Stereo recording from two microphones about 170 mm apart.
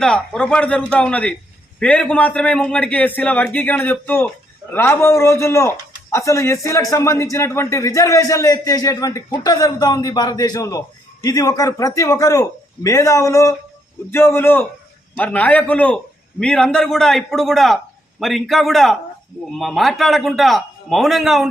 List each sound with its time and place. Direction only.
0.0 s a man's voice: 5° left (ahead or behind)